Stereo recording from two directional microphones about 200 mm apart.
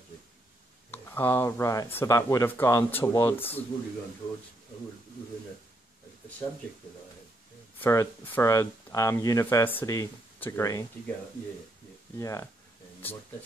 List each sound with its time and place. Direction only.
0.9 s speech: 10° left (ahead or behind)
7.8 s speech: 15° left (ahead or behind)
12.2 s speech: 15° left (ahead or behind)